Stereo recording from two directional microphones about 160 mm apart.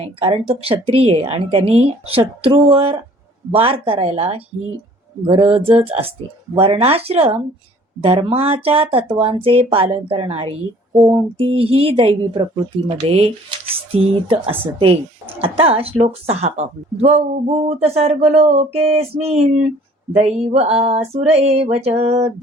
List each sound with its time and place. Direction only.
0.0 s a woman's voice: 35° right (ahead or behind)